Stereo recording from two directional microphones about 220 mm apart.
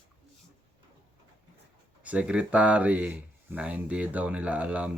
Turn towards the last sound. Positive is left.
turn(degrees=-5)  # may be behind; listen again after turning